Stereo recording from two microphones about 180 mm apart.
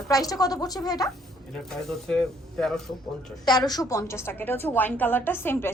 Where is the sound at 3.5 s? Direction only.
20° left (ahead or behind).